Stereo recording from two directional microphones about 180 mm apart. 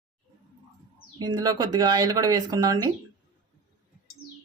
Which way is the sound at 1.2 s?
25° right (ahead or behind).